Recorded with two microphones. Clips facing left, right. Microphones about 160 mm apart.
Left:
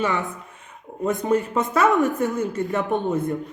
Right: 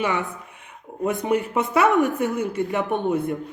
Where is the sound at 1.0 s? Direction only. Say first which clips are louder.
Left 1 dB; 15° right (ahead or behind).